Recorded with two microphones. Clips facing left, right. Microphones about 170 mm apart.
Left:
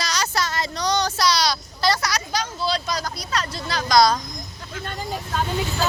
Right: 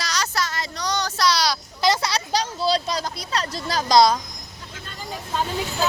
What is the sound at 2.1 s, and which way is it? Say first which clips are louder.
Speech: right 2 dB; 35° right (ahead or behind).